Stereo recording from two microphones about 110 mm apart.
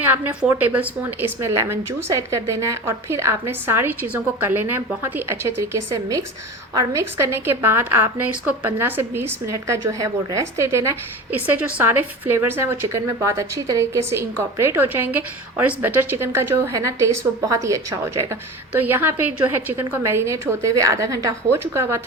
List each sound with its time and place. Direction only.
0.0 s a woman's voice: 15° right (ahead or behind)
1.4 s a woman's voice: 25° right (ahead or behind)